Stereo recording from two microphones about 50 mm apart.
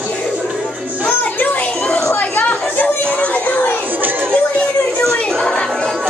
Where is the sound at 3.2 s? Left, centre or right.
Left.